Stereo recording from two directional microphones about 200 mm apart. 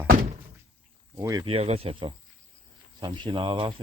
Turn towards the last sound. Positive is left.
turn(degrees=-25)  # may be behind; listen again after turning